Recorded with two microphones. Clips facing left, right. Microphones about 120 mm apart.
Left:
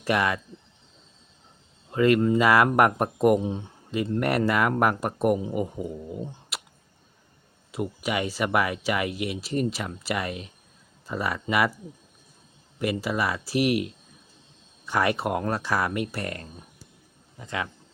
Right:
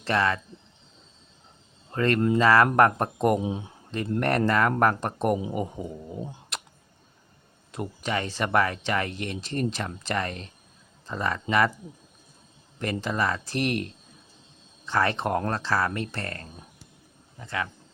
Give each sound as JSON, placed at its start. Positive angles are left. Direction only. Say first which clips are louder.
{"t": 0.0, "sound": "speech", "louder": "even", "side_deg": 15}
{"t": 1.9, "sound": "speech", "louder": "left 3 dB", "side_deg": 10}
{"t": 3.4, "sound": "speech", "louder": "even", "side_deg": -10}
{"t": 4.2, "sound": "speech", "louder": "right 1 dB", "side_deg": 10}
{"t": 7.7, "sound": "speech", "louder": "left 2 dB", "side_deg": 5}
{"t": 12.8, "sound": "speech", "louder": "left 1 dB", "side_deg": 10}